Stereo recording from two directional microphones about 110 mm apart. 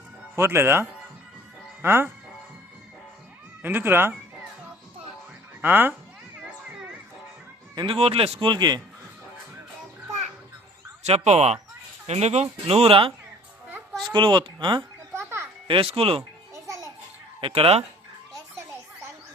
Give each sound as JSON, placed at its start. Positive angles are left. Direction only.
{"t": 0.2, "sound": "speech", "side_deg": -20}
{"t": 3.6, "sound": "speech", "side_deg": -20}
{"t": 5.6, "sound": "speech", "side_deg": -20}
{"t": 7.8, "sound": "speech", "side_deg": -60}
{"t": 11.0, "sound": "speech", "side_deg": -80}
{"t": 14.1, "sound": "speech", "side_deg": -45}
{"t": 16.6, "sound": "children playing", "side_deg": -30}
{"t": 17.4, "sound": "speech", "side_deg": -60}